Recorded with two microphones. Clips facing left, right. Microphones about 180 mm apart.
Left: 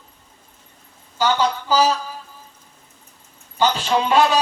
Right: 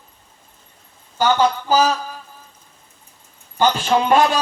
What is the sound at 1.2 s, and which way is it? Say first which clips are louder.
Speech: right 3 dB; 50° right (ahead or behind).